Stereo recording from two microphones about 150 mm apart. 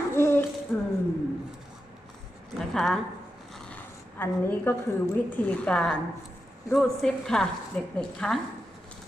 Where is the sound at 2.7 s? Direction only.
Centre (ahead or behind).